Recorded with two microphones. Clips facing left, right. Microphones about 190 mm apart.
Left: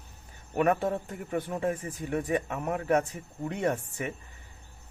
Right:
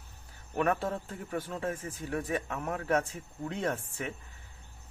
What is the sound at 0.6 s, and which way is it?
Speech, 15° left (ahead or behind).